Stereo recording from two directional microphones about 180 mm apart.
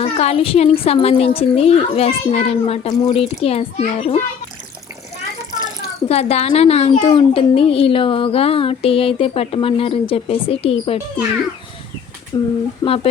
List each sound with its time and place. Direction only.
0.0 s a child's voice: 35° left (ahead or behind)
6.1 s a child's voice: 35° left (ahead or behind)
12.3 s speech: 20° left (ahead or behind)
12.8 s a child's voice: 30° left (ahead or behind)